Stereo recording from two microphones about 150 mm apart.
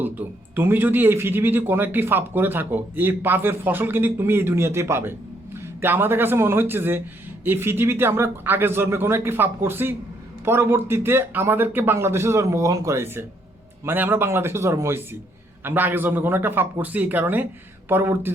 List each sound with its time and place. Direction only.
0.0 s speech: 15° right (ahead or behind)